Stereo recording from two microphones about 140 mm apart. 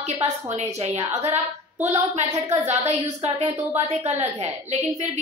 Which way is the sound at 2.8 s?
50° right (ahead or behind).